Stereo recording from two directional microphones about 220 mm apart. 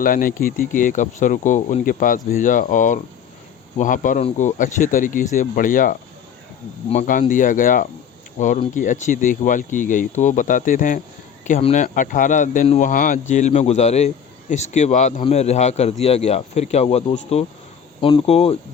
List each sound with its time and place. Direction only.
0.0 s speech: 40° left (ahead or behind)
18.0 s speech: 25° left (ahead or behind)